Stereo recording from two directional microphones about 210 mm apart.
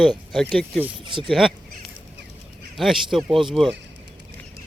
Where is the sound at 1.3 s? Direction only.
Centre (ahead or behind).